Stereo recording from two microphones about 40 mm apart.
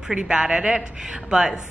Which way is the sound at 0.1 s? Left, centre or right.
Right.